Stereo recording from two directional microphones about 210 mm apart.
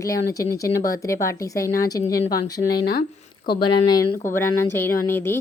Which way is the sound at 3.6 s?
20° left (ahead or behind).